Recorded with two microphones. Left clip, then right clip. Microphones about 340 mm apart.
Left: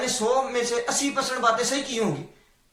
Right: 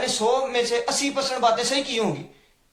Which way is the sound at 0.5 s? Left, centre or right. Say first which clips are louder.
Right 2 dB; centre.